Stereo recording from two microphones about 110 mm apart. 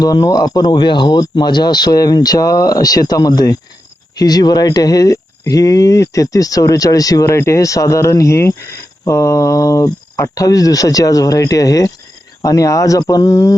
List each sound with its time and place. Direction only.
0.0 s speech: 35° left (ahead or behind)